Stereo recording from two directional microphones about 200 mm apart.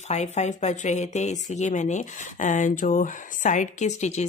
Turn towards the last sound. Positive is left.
turn(degrees=35)  # may be behind; listen again after turning